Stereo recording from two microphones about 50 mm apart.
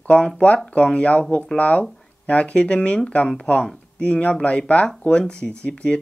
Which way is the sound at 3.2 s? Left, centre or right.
Centre.